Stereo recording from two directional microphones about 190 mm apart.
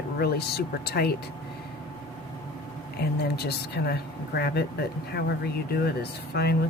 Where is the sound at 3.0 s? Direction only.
55° left (ahead or behind).